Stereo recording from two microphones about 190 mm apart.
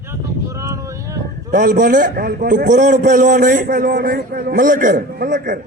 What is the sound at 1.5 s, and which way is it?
A man's voice, 45° right (ahead or behind).